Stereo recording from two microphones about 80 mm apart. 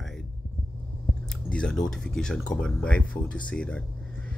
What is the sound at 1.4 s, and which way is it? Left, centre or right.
Speech, centre.